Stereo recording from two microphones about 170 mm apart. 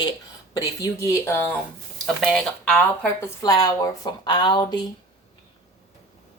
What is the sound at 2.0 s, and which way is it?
Speech, centre (ahead or behind).